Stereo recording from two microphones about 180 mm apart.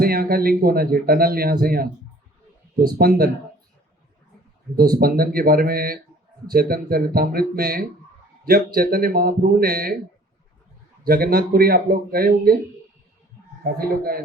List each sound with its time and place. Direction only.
0.0 s a man's voice: 55° right (ahead or behind)
3.0 s a man's voice: 55° right (ahead or behind)
4.8 s a man's voice: 55° right (ahead or behind)
11.0 s a man's voice: 55° right (ahead or behind)
13.7 s a man's voice: 55° right (ahead or behind)